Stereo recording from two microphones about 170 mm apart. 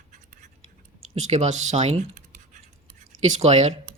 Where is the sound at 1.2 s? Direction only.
40° right (ahead or behind).